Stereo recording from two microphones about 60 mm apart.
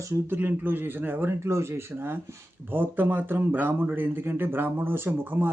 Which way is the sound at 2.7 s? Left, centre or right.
Right.